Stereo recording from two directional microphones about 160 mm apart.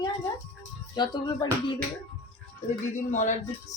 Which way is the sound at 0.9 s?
25° left (ahead or behind).